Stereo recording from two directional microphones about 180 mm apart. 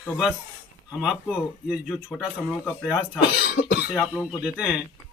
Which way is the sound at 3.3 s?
60° left (ahead or behind).